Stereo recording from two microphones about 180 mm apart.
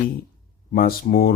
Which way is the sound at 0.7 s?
55° left (ahead or behind).